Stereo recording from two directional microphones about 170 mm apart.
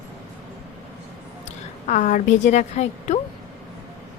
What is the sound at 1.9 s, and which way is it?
Speech, 45° left (ahead or behind).